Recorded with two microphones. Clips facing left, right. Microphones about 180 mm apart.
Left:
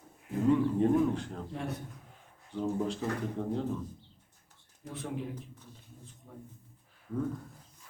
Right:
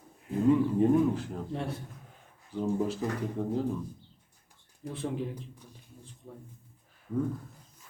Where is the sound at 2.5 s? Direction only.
5° right (ahead or behind).